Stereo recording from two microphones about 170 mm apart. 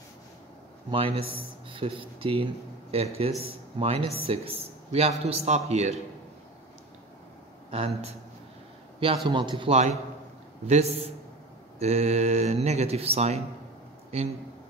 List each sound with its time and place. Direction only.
0.9 s speech: 35° right (ahead or behind)
7.7 s speech: 35° right (ahead or behind)